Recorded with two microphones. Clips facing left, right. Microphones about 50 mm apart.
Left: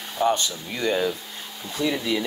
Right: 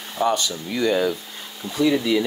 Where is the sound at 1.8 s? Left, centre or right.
Right.